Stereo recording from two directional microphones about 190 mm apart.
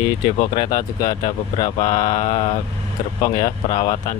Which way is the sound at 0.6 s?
20° left (ahead or behind).